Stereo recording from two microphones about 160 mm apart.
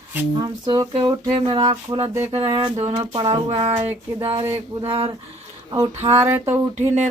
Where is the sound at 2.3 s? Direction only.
35° right (ahead or behind).